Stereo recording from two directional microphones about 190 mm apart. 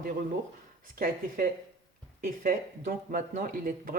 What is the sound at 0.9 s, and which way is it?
Speech, 50° right (ahead or behind).